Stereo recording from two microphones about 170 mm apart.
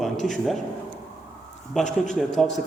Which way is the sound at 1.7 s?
5° left (ahead or behind).